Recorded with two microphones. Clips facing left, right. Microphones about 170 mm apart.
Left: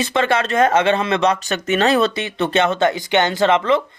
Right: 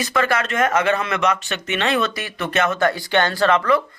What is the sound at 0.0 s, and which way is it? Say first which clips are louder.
Speech: left 3 dB; 25° left (ahead or behind).